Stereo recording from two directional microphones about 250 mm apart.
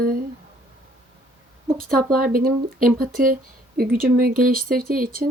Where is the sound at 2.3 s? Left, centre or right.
Right.